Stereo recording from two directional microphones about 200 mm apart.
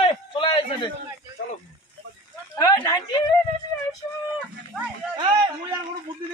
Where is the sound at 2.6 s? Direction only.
15° left (ahead or behind).